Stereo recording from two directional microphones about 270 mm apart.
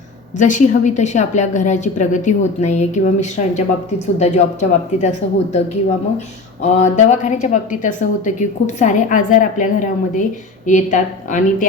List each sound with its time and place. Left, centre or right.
0.3 s a woman's voice: left